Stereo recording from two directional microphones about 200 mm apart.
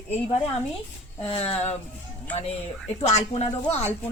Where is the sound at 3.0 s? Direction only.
35° left (ahead or behind).